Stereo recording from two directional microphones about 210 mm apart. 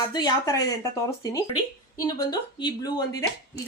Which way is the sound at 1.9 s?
20° left (ahead or behind).